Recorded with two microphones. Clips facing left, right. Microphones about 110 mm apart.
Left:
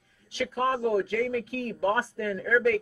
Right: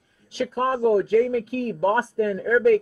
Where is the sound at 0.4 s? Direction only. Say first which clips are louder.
Right 4 dB; 25° right (ahead or behind).